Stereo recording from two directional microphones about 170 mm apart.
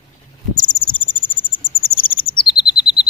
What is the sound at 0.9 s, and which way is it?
Cricket, 10° left (ahead or behind).